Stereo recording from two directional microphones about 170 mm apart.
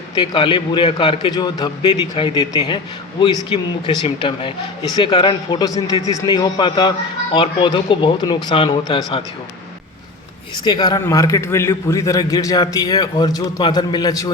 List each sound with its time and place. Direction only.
0.2 s a man's voice: 30° left (ahead or behind)
10.6 s a man's voice: 25° left (ahead or behind)